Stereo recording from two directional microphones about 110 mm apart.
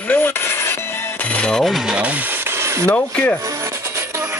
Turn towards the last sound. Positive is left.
turn(degrees=15)  # may be behind; listen again after turning